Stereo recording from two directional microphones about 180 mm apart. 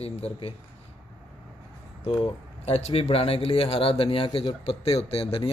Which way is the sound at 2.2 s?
35° left (ahead or behind).